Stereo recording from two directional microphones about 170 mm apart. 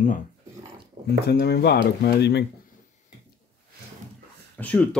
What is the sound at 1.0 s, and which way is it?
Speech, 75° left (ahead or behind).